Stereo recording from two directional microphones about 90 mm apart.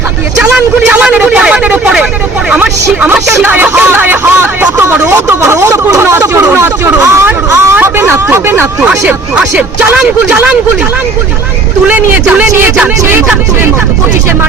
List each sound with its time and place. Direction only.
0.5 s speech: 10° right (ahead or behind)
8.9 s speech: 10° right (ahead or behind)
11.9 s speech: 15° right (ahead or behind)